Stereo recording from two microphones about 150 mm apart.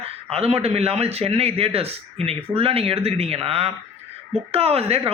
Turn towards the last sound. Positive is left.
turn(degrees=-40)  # may be behind; listen again after turning